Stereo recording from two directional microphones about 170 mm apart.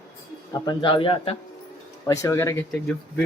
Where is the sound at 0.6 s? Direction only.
25° left (ahead or behind).